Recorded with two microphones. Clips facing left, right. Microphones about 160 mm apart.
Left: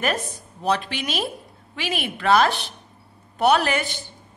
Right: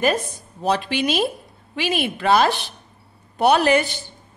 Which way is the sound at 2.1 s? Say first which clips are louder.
Even; 25° right (ahead or behind).